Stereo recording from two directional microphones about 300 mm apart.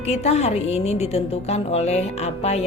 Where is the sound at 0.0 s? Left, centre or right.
Left.